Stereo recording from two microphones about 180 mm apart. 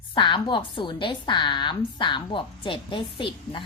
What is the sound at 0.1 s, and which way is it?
A woman's voice, 25° left (ahead or behind).